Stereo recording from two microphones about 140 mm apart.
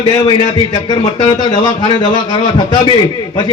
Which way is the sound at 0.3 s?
30° left (ahead or behind).